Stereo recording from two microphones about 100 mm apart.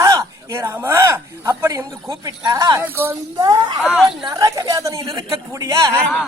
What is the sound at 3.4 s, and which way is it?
Speech, 45° right (ahead or behind).